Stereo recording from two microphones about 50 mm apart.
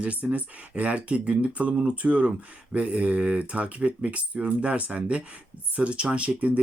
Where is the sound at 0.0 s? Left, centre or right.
Right.